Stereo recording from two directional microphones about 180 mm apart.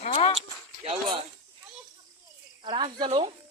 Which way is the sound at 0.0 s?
35° left (ahead or behind).